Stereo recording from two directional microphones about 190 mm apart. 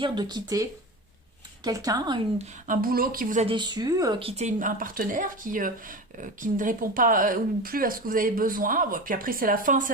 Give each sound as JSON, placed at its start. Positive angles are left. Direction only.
{"t": 0.0, "sound": "speech", "side_deg": -25}
{"t": 2.4, "sound": "speech", "side_deg": -45}
{"t": 3.4, "sound": "speech", "side_deg": -25}